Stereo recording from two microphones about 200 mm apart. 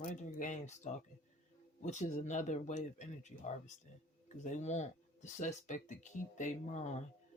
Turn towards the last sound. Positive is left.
turn(degrees=35)  # may be behind; listen again after turning